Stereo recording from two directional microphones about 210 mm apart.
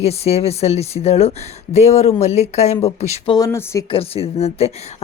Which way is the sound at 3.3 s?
15° left (ahead or behind).